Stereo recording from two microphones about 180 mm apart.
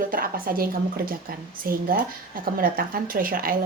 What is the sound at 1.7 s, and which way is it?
A woman's voice, 55° right (ahead or behind).